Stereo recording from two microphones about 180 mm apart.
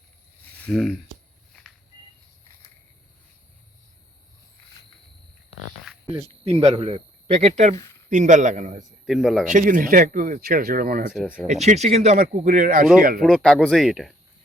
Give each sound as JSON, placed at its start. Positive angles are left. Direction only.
{"t": 0.5, "sound": "speech", "side_deg": 5}
{"t": 5.8, "sound": "a sound", "side_deg": -5}
{"t": 6.4, "sound": "a man's voice", "side_deg": -35}
{"t": 7.8, "sound": "a sound", "side_deg": 15}
{"t": 8.1, "sound": "speech", "side_deg": -45}
{"t": 9.0, "sound": "speech", "side_deg": 0}
{"t": 9.5, "sound": "speech", "side_deg": -50}
{"t": 11.1, "sound": "speech", "side_deg": 0}
{"t": 11.4, "sound": "speech", "side_deg": -40}
{"t": 13.2, "sound": "speech", "side_deg": 5}